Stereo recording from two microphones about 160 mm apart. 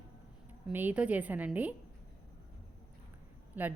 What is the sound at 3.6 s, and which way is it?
Speech, 10° right (ahead or behind).